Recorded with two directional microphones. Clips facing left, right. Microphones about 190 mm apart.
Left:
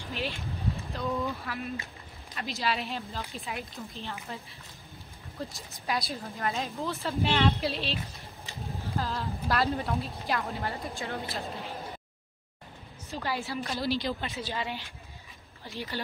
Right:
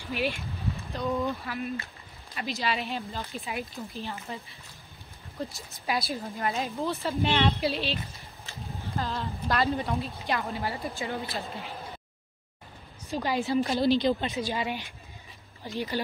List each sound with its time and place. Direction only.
0.1 s a woman's voice: 15° right (ahead or behind)
1.4 s speech: centre (ahead or behind)
13.1 s a woman's voice: 15° right (ahead or behind)